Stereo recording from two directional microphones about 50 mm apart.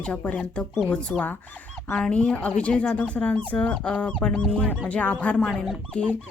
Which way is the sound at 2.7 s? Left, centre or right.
Centre.